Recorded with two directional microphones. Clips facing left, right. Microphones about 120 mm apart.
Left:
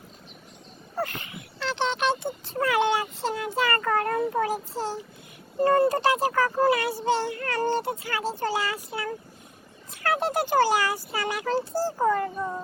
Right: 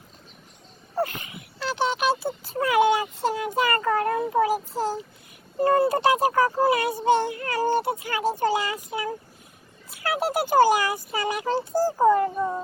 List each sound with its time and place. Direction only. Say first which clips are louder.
1.0 s dog: right 2 dB; 20° right (ahead or behind)
2.6 s a sound: right 3 dB; 15° right (ahead or behind)
5.5 s speech: even; 15° right (ahead or behind)